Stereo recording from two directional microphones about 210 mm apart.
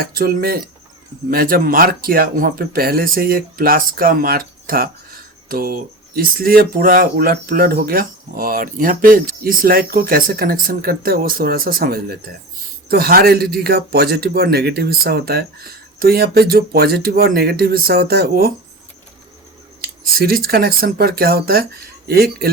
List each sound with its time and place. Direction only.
0.0 s speech: 45° right (ahead or behind)
19.8 s speech: 45° right (ahead or behind)